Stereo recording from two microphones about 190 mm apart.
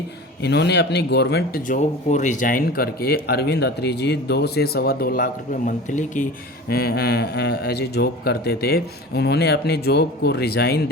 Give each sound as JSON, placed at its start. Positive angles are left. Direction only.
{"t": 0.4, "sound": "speech", "side_deg": 60}
{"t": 6.7, "sound": "speech", "side_deg": 55}